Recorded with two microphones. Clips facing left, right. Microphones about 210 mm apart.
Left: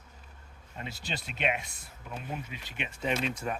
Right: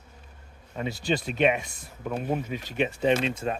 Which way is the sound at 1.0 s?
45° right (ahead or behind).